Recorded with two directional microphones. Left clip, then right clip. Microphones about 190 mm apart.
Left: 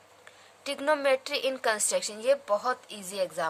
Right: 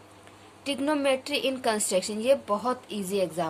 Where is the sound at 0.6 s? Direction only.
30° left (ahead or behind).